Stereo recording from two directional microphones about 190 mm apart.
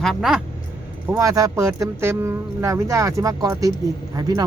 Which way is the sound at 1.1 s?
15° right (ahead or behind).